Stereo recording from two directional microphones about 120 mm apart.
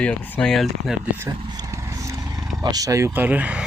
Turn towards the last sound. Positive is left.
turn(degrees=-10)  # may be behind; listen again after turning